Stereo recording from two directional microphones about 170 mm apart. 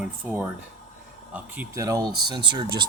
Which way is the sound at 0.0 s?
10° right (ahead or behind).